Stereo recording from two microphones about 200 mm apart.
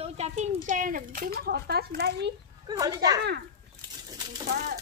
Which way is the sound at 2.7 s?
20° right (ahead or behind).